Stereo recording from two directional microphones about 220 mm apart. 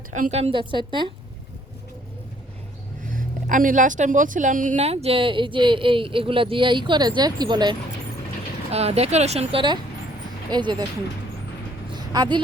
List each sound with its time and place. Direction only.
0.3 s speech: 30° right (ahead or behind)
3.1 s speech: 40° right (ahead or behind); by 10.8 s 20° right (ahead or behind)
11.9 s a sound: 20° right (ahead or behind)